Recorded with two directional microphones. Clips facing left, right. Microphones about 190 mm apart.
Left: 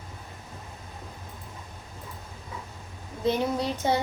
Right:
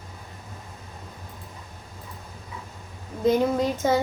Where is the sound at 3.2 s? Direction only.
45° right (ahead or behind).